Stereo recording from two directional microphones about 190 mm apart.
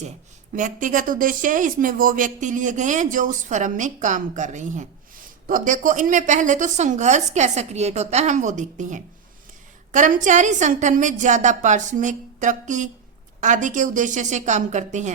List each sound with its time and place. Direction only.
0.5 s a woman's voice: 45° right (ahead or behind)